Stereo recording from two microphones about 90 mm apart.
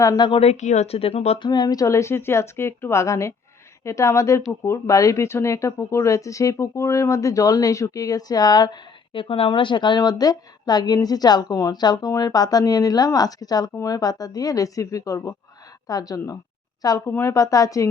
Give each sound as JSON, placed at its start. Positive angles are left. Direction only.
{"t": 0.9, "sound": "speech", "side_deg": 90}
{"t": 1.5, "sound": "speech", "side_deg": 50}
{"t": 17.1, "sound": "speech", "side_deg": 25}
{"t": 17.3, "sound": "speech", "side_deg": 40}